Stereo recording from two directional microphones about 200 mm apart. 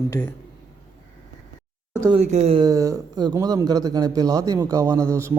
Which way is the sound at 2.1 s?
35° right (ahead or behind).